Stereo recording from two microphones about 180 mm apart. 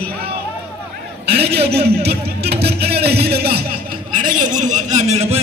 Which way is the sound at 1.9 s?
60° right (ahead or behind).